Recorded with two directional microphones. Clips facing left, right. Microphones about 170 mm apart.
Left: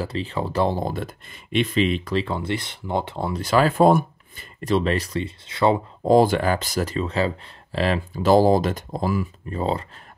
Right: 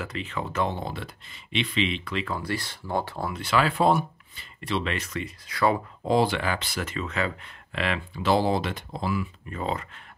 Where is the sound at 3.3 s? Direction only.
40° left (ahead or behind); by 5.8 s 25° left (ahead or behind).